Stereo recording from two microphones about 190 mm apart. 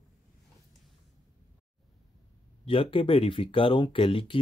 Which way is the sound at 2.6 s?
30° left (ahead or behind).